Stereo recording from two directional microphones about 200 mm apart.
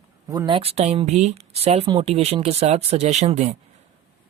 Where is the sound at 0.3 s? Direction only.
20° right (ahead or behind).